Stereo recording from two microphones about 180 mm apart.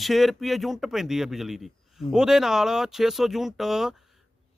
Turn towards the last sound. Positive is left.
turn(degrees=0)  # may be behind; listen again after turning